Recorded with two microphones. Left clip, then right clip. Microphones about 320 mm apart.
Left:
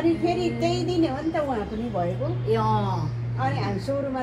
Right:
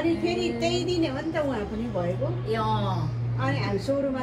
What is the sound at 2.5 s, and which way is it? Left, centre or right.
Speech, centre.